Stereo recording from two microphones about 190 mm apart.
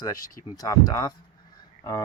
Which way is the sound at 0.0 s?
20° left (ahead or behind).